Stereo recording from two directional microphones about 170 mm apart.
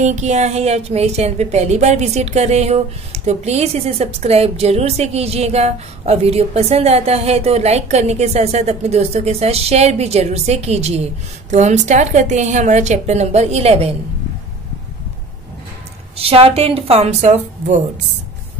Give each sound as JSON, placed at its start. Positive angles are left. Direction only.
{"t": 0.0, "sound": "a woman's voice", "side_deg": -45}
{"t": 16.2, "sound": "speech", "side_deg": -35}